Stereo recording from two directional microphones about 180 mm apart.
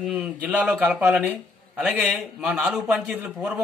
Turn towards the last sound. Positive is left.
turn(degrees=-5)  # may be behind; listen again after turning